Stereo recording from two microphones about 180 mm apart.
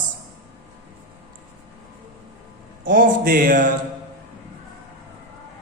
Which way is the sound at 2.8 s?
45° right (ahead or behind).